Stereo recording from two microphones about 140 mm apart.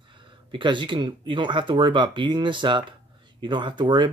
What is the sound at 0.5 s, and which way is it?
Speech, 35° right (ahead or behind).